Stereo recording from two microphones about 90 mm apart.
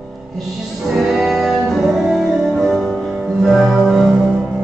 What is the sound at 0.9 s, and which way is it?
Music, 5° right (ahead or behind).